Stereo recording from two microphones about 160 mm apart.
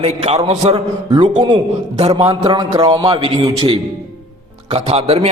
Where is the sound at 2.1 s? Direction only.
25° right (ahead or behind).